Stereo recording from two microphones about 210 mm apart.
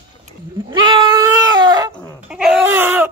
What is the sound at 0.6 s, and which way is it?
Goat, 20° right (ahead or behind).